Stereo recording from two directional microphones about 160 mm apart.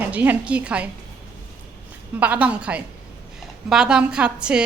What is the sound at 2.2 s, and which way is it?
A woman's voice, 10° right (ahead or behind).